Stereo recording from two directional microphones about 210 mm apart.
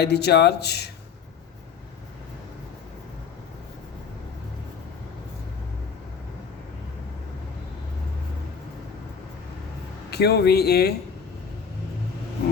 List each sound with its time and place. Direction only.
0.0 s speech: 50° left (ahead or behind)
10.1 s speech: 50° left (ahead or behind)